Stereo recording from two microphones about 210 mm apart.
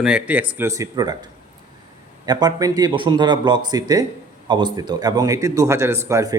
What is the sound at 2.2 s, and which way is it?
A man's voice, 20° right (ahead or behind).